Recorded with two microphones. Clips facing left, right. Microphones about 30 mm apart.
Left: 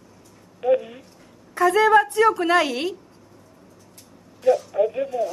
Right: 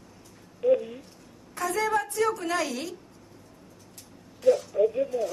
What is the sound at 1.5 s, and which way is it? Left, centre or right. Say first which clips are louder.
A woman's voice: left 11 dB; left.